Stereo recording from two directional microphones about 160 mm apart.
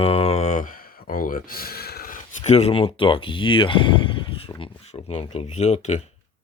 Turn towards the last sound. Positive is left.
turn(degrees=45)  # may be behind; listen again after turning